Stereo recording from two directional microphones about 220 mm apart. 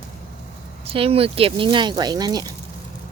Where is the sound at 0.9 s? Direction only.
25° right (ahead or behind).